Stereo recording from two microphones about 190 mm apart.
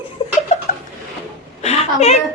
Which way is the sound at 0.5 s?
35° left (ahead or behind).